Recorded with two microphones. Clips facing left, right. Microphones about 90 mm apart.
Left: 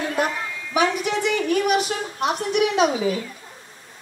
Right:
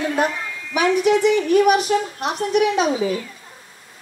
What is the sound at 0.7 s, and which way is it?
Speech, 35° left (ahead or behind).